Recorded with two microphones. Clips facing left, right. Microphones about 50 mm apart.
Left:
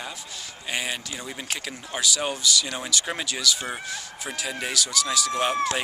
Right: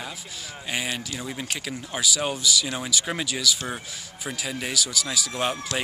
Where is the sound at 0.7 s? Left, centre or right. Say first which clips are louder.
Even; centre.